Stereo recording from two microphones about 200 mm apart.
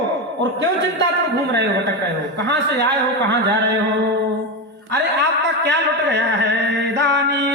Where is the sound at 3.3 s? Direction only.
60° right (ahead or behind).